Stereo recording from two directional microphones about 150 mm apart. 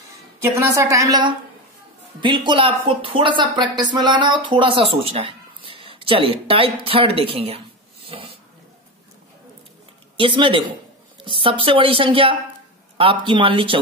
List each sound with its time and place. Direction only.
0.4 s a woman's voice: 20° right (ahead or behind); by 8.4 s 35° right (ahead or behind)
10.1 s a woman's voice: 35° right (ahead or behind)